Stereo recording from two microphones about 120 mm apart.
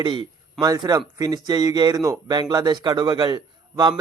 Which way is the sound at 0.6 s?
35° right (ahead or behind).